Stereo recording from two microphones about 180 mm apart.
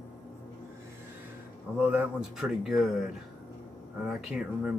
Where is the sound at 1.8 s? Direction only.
10° right (ahead or behind).